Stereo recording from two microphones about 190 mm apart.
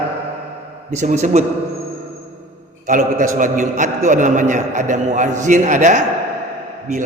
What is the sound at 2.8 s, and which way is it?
A man's voice, 40° right (ahead or behind).